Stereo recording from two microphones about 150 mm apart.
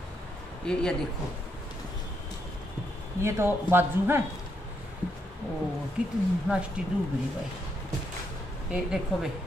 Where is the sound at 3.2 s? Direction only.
15° right (ahead or behind).